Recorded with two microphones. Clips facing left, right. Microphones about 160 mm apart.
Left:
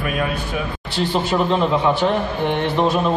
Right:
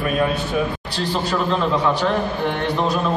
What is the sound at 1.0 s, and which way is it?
A man's voice, 25° left (ahead or behind).